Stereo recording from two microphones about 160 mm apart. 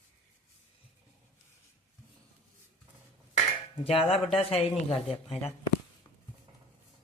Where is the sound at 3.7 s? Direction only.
35° left (ahead or behind).